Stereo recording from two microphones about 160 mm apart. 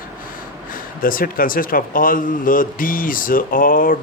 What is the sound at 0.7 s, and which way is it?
Speech, 60° left (ahead or behind).